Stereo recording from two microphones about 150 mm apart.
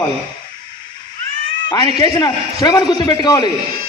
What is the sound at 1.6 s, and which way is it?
A man's voice, 30° left (ahead or behind).